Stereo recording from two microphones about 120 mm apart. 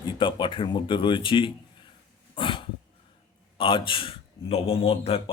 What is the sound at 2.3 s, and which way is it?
Dog, 45° left (ahead or behind).